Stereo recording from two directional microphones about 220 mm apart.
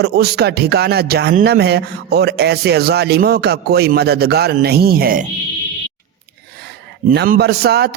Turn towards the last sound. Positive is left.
turn(degrees=-45)  # may be behind; listen again after turning